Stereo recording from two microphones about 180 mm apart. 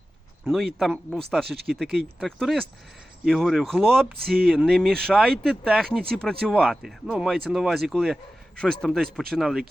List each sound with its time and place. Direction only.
0.5 s speech: centre (ahead or behind)
1.5 s speech: 60° right (ahead or behind)
2.1 s speech: centre (ahead or behind)